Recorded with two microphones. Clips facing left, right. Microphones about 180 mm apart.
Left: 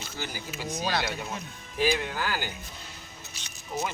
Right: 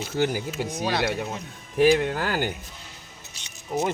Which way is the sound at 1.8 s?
60° right (ahead or behind).